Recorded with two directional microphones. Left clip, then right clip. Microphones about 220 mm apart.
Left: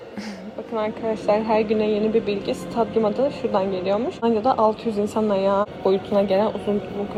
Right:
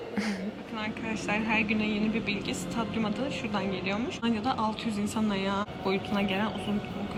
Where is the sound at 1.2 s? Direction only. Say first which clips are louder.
Left 9 dB; 45° right (ahead or behind).